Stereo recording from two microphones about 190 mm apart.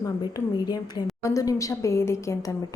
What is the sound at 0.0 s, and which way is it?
A woman's voice, 20° left (ahead or behind).